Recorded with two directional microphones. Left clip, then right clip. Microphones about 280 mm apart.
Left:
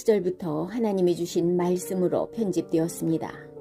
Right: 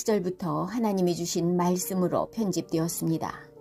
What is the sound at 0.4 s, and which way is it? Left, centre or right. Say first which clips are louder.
Speech: even; right.